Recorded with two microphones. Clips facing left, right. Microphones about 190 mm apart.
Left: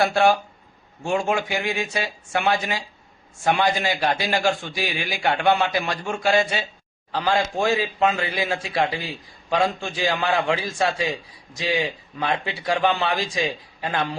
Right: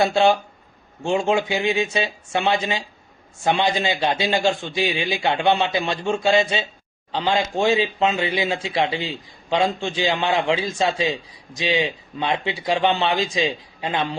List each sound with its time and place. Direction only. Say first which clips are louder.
0.0 s a man's voice: right 1 dB; 20° right (ahead or behind)